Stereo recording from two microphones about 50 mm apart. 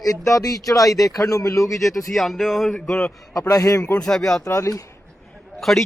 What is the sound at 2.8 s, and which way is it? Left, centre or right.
Speech, centre.